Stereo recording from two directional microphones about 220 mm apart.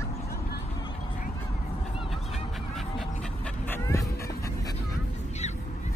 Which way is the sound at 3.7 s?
10° left (ahead or behind).